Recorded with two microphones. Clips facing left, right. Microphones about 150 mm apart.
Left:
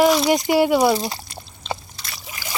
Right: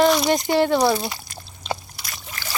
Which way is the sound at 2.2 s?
10° left (ahead or behind).